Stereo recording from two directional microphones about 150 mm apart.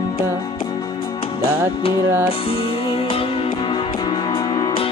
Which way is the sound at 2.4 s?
40° left (ahead or behind).